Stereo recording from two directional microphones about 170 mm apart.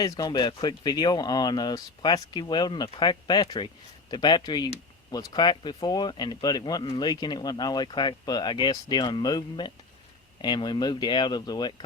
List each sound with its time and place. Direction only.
0.0 s speech: 20° left (ahead or behind)